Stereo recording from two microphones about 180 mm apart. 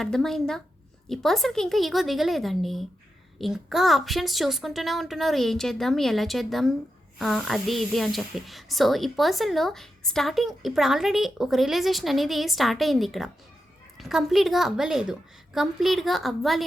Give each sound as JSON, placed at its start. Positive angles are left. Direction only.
{"t": 0.0, "sound": "speech", "side_deg": 0}